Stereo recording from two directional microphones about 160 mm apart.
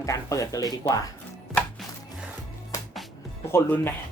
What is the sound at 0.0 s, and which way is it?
Speech, 20° left (ahead or behind).